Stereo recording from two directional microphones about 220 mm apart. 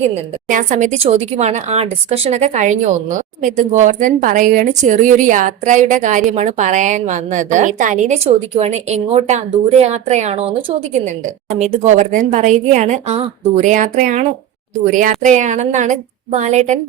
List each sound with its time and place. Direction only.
0.0 s speech: 35° right (ahead or behind)